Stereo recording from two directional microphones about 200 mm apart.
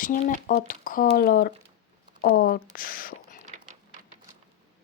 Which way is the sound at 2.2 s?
45° left (ahead or behind).